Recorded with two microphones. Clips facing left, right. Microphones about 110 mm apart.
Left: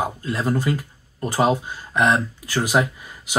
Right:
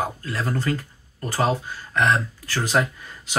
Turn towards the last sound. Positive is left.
turn(degrees=15)  # may be behind; listen again after turning